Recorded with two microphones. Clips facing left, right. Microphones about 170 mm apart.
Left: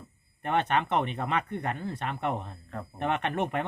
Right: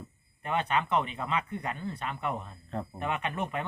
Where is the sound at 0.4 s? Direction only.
60° left (ahead or behind).